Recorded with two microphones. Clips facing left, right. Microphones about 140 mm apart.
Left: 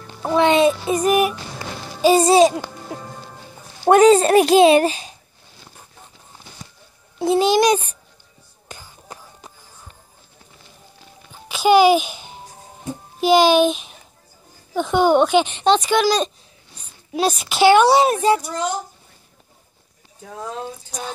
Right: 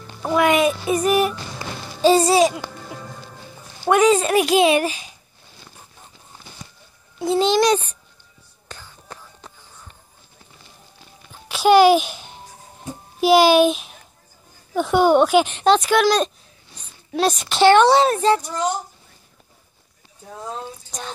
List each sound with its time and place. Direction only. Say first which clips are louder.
0.3 s a child's voice: left 2 dB; 25° left (ahead or behind)
1.0 s a woman's voice: left 2 dB; 15° left (ahead or behind)
2.0 s music: even; 10° left (ahead or behind)
2.2 s speech: left 3 dB; 30° left (ahead or behind)
7.3 s a woman's voice: left 1 dB; 10° left (ahead or behind)
8.6 s a sound: left 1 dB; 15° left (ahead or behind)
11.4 s babbling: right 1 dB; centre (ahead or behind)
13.2 s a child's voice: right 1 dB; 5° right (ahead or behind); by 18.4 s 10° left (ahead or behind)